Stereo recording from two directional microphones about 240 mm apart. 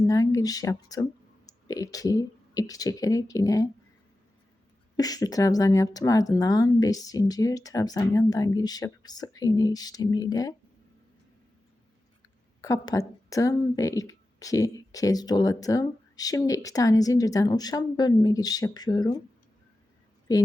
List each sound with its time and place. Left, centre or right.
0.1 s speech: centre
4.9 s speech: centre
12.6 s speech: centre
20.3 s speech: centre